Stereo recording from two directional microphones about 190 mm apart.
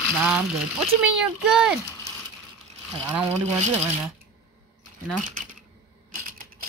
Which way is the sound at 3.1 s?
10° right (ahead or behind).